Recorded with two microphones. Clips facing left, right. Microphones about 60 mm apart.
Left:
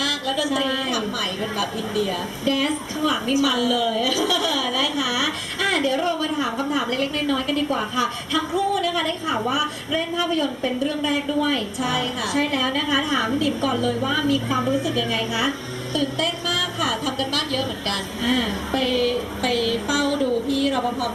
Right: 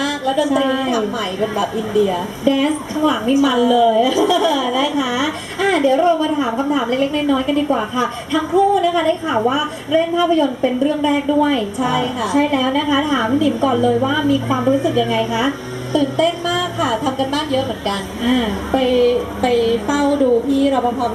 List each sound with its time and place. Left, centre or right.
0.0 s a sound: right
1.5 s speech: right
8.5 s speech: right
9.5 s a woman's voice: right
10.2 s speech: centre
11.0 s a woman's voice: right
15.3 s a woman's voice: right
15.9 s speech: right